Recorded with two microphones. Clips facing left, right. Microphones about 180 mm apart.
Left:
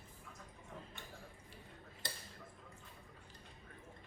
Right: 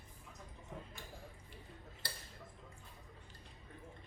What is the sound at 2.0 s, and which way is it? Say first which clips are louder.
Tick-tock: left 2 dB; 20° left (ahead or behind).